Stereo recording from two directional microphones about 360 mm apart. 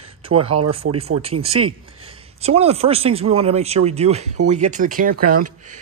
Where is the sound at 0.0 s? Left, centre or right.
Centre.